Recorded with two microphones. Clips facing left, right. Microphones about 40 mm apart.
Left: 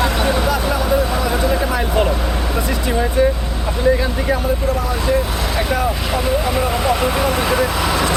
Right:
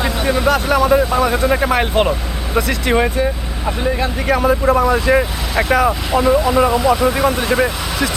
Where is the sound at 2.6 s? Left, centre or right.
Right.